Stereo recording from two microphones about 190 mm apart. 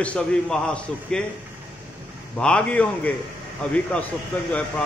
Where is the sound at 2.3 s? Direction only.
5° left (ahead or behind).